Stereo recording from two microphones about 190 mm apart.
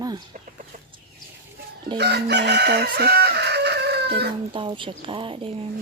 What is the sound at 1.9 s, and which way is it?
Chicken, 60° right (ahead or behind).